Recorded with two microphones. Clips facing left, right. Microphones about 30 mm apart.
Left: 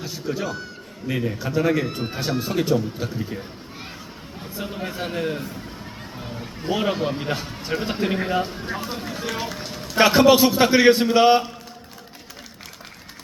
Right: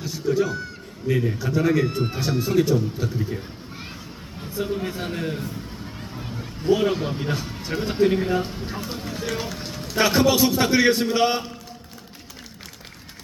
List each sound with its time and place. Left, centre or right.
0.0 s a man's voice: centre
10.0 s a man's voice: centre